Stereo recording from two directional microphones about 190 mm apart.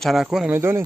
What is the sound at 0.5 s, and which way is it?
Speech, 15° right (ahead or behind).